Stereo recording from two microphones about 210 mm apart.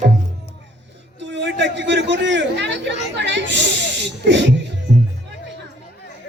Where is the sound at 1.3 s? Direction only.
60° right (ahead or behind).